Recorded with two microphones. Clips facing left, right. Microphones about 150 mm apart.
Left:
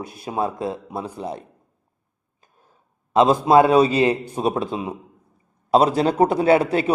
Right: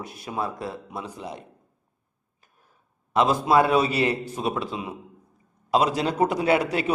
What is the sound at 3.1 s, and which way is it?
A man's voice, 25° left (ahead or behind).